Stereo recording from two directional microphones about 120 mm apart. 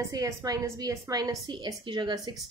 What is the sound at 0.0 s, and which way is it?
A woman's voice, 30° right (ahead or behind).